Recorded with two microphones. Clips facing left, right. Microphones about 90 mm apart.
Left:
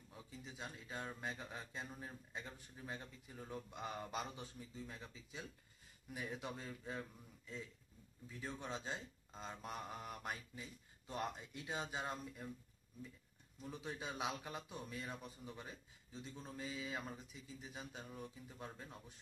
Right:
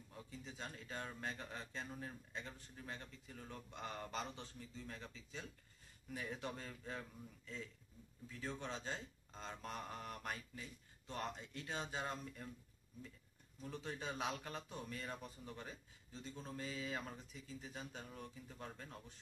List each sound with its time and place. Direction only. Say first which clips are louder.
0.1 s speech: right 1 dB; 5° left (ahead or behind)
13.6 s speech: even; 5° left (ahead or behind)